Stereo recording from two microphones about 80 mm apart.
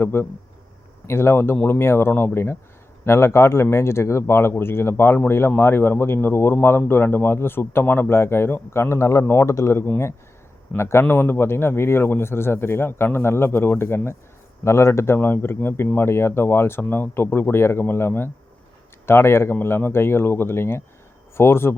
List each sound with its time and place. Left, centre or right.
0.0 s a man's voice: left